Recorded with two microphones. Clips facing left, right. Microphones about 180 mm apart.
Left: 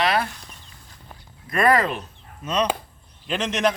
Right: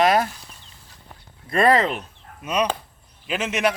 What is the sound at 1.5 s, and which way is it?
Speech, 25° right (ahead or behind).